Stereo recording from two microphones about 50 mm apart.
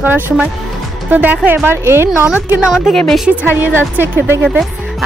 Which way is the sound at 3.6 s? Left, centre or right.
Right.